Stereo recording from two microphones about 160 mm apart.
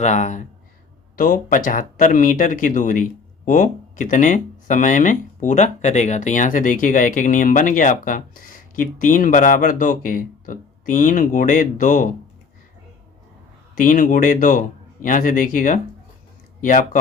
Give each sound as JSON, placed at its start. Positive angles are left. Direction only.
{"t": 0.0, "sound": "speech", "side_deg": 50}
{"t": 13.7, "sound": "speech", "side_deg": 55}